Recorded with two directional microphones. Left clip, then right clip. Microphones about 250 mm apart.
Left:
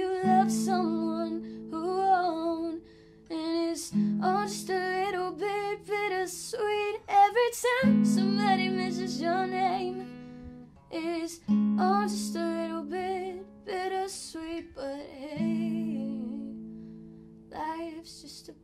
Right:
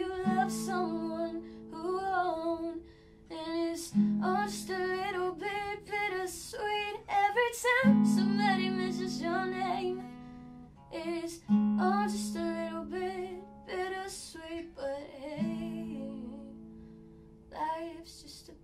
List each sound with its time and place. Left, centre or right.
0.1 s music: left
10.9 s music: left
17.6 s music: left